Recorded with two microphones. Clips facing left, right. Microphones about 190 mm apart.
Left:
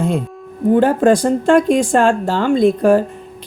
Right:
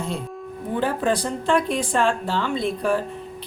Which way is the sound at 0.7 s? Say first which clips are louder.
Left 11 dB; 45° left (ahead or behind).